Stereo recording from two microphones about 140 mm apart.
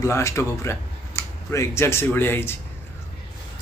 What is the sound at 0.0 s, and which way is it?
Speech, 20° left (ahead or behind).